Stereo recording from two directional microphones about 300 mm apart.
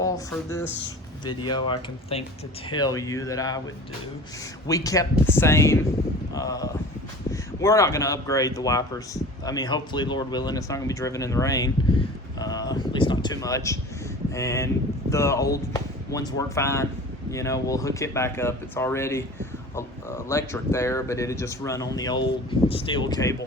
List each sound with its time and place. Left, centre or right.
0.0 s speech: centre
4.6 s speech: centre